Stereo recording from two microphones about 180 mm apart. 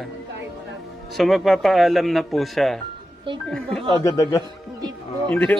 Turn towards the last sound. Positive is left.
turn(degrees=10)  # may be behind; listen again after turning